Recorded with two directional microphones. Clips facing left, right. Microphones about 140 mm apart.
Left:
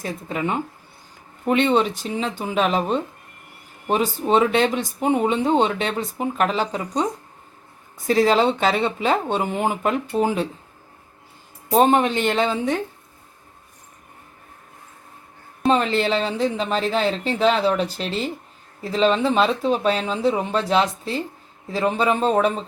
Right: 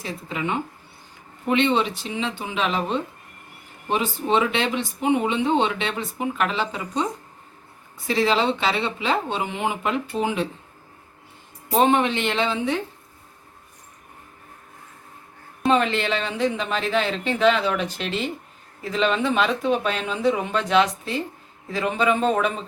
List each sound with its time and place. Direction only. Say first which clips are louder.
0.0 s speech: left 3 dB; 45° left (ahead or behind)
8.0 s speech: left 4 dB; 45° left (ahead or behind)
11.8 s speech: left 2 dB; 40° left (ahead or behind)
15.7 s speech: left 2 dB; 35° left (ahead or behind)